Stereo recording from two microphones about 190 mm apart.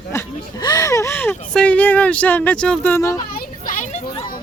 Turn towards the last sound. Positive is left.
turn(degrees=40)  # may be behind; listen again after turning